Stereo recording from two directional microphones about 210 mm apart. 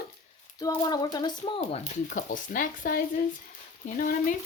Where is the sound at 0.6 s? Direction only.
20° left (ahead or behind).